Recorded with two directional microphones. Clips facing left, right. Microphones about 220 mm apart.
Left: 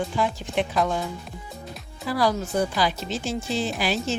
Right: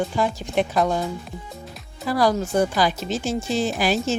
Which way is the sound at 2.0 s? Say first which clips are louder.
Right 3 dB; 45° right (ahead or behind).